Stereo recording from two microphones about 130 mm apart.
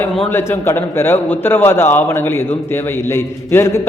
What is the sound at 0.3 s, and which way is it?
A man's voice, 20° left (ahead or behind).